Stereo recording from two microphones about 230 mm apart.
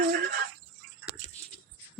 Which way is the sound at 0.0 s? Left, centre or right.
Right.